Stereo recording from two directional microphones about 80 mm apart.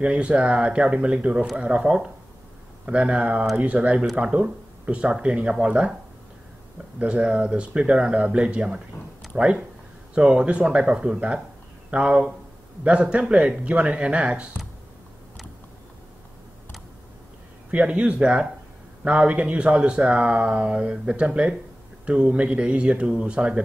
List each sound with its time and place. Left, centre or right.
0.0 s speech: centre
7.0 s speech: centre
17.6 s speech: centre